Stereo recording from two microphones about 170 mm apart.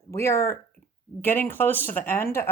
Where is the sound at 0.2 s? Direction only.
15° left (ahead or behind).